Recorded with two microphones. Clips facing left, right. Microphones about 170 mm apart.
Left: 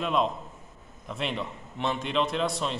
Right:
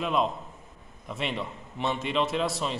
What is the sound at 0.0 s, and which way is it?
A man's voice, centre (ahead or behind).